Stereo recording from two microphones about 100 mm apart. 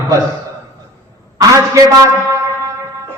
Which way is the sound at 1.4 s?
35° right (ahead or behind).